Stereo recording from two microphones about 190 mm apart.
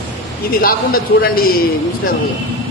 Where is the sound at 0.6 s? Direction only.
50° left (ahead or behind).